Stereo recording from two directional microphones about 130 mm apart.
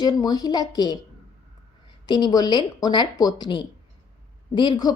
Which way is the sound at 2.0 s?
35° left (ahead or behind).